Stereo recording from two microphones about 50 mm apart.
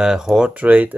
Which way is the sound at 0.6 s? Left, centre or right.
Right.